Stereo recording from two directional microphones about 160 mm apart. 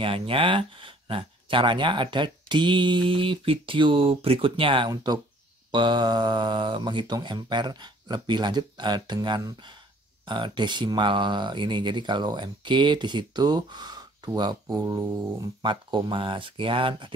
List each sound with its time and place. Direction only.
0.0 s speech: 35° right (ahead or behind)